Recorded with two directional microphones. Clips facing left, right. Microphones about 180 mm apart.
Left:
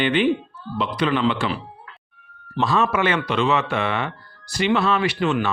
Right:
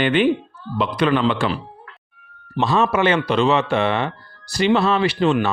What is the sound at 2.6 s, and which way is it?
Speech, 25° right (ahead or behind).